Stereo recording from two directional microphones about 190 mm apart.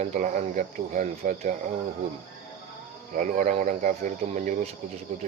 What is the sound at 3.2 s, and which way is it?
Speech, 40° right (ahead or behind).